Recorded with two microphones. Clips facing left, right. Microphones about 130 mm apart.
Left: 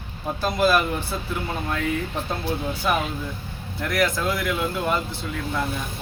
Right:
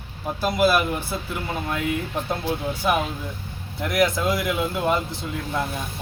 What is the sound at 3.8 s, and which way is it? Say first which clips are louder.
Speech: right 2 dB; 15° right (ahead or behind).